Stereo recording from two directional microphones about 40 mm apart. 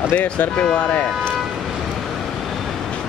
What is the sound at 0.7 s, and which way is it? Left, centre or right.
Speech, left.